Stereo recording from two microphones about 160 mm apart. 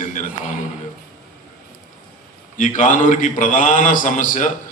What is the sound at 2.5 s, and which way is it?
A man's voice, 50° left (ahead or behind).